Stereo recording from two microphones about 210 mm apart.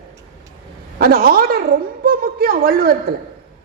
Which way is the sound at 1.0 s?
45° right (ahead or behind).